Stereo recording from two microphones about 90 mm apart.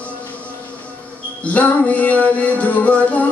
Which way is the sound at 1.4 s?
15° left (ahead or behind).